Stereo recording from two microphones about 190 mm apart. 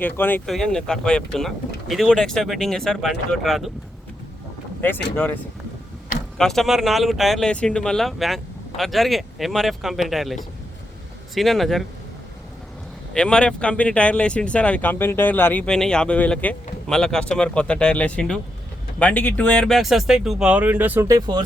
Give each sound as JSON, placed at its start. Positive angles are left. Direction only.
{"t": 0.0, "sound": "speech", "side_deg": 10}
{"t": 5.1, "sound": "speech", "side_deg": 10}
{"t": 13.1, "sound": "speech", "side_deg": 5}